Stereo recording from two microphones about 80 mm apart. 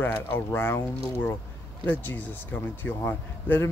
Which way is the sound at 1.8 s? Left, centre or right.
Left.